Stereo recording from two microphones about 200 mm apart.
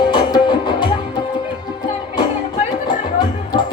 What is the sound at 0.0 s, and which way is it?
Music, 20° left (ahead or behind).